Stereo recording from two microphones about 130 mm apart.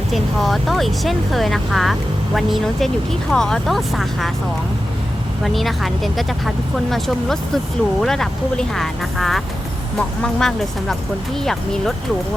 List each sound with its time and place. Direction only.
0.1 s speech: centre (ahead or behind)
5.4 s speech: centre (ahead or behind)